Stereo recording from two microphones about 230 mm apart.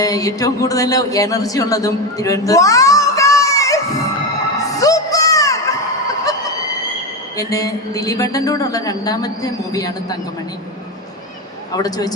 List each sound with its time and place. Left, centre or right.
0.0 s speech: centre
4.6 s music: centre
7.3 s speech: centre
11.7 s speech: centre